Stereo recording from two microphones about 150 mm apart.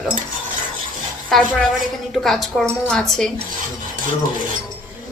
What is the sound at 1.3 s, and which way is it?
A woman's voice, centre (ahead or behind).